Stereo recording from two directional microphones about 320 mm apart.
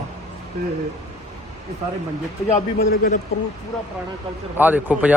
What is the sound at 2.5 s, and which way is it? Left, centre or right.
Speech, left.